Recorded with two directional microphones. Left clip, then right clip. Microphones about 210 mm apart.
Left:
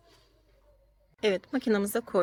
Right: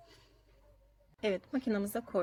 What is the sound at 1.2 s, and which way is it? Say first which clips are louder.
Speech: left 6 dB; 25° left (ahead or behind).